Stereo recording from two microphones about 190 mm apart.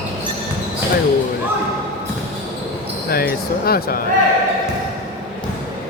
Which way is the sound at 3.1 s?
55° left (ahead or behind).